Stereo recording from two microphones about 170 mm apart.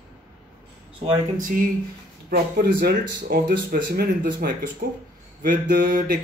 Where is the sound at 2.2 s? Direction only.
65° right (ahead or behind).